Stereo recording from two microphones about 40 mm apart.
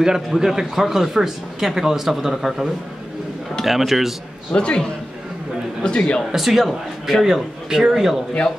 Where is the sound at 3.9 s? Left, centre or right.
Centre.